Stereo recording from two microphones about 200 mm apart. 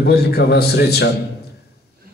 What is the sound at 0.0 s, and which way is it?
A man's voice, 55° left (ahead or behind).